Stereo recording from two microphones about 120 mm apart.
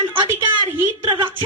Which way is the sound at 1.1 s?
45° right (ahead or behind).